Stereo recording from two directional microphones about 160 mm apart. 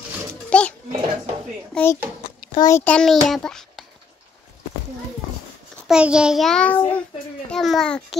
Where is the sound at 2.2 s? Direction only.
30° left (ahead or behind).